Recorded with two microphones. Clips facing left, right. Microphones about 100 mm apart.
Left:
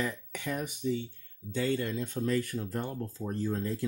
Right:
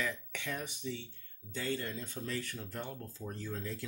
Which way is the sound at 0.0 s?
40° left (ahead or behind).